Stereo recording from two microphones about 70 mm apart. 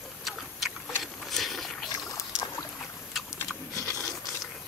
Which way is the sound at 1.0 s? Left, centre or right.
Centre.